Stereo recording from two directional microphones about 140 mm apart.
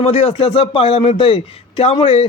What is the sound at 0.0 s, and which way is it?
Speech, 50° left (ahead or behind).